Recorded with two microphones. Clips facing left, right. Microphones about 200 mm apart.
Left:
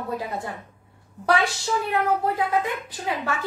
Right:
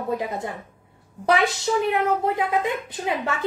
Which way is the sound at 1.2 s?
20° right (ahead or behind).